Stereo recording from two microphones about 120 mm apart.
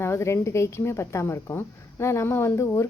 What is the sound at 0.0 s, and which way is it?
A woman's voice, 20° left (ahead or behind).